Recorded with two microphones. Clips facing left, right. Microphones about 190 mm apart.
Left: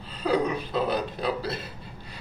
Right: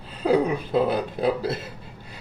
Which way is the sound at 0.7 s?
50° right (ahead or behind).